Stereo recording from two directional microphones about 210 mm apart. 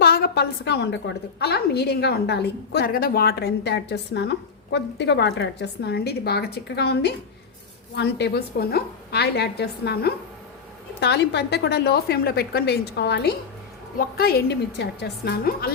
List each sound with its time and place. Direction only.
0.0 s a woman's voice: 50° left (ahead or behind)